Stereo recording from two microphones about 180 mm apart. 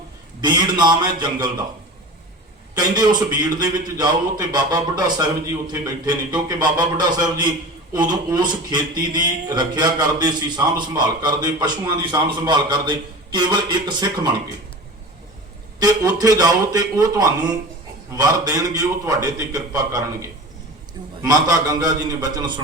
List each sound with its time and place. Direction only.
0.4 s speech: 25° right (ahead or behind)
2.7 s speech: 25° right (ahead or behind)
15.8 s speech: 20° right (ahead or behind)
21.2 s speech: 20° right (ahead or behind)